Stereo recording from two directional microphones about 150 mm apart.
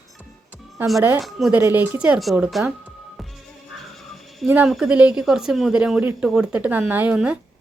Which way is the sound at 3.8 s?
Centre (ahead or behind).